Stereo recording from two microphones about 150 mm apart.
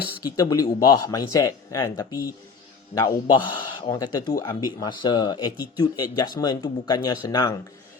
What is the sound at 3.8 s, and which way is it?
A man's voice, 25° left (ahead or behind).